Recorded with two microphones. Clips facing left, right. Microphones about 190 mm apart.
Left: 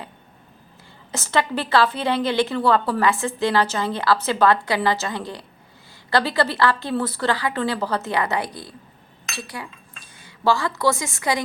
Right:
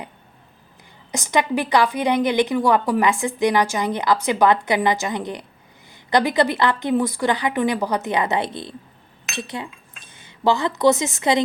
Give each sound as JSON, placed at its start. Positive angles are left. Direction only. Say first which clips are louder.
{"t": 1.1, "sound": "a woman's voice", "louder": "right 2 dB", "side_deg": -15}